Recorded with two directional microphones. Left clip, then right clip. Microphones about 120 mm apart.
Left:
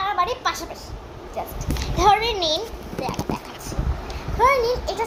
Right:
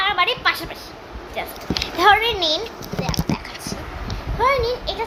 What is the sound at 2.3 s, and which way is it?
Speech, 5° right (ahead or behind).